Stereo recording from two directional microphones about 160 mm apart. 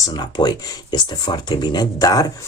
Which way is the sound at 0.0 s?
25° left (ahead or behind).